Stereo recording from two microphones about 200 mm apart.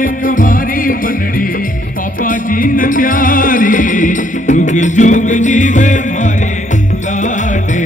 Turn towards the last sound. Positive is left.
turn(degrees=40)  # may be behind; listen again after turning